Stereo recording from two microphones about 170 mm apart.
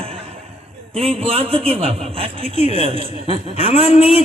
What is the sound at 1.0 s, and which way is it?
A man's voice, 35° right (ahead or behind).